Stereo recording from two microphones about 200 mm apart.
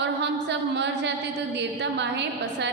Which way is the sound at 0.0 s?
60° right (ahead or behind).